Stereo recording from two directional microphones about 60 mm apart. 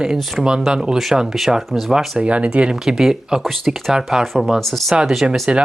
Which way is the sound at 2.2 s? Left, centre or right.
Centre.